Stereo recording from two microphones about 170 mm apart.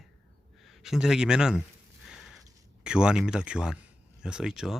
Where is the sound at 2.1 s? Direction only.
Centre (ahead or behind).